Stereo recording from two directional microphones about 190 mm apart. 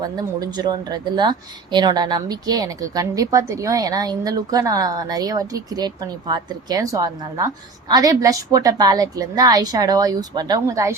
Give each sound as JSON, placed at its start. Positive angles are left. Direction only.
{"t": 0.0, "sound": "speech", "side_deg": -20}